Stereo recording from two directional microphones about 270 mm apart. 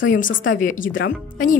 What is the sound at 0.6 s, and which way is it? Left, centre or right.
Speech, left.